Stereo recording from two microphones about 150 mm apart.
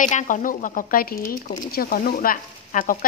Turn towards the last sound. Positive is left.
turn(degrees=65)  # may be behind; listen again after turning